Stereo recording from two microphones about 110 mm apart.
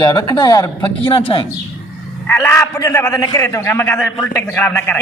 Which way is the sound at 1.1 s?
55° left (ahead or behind).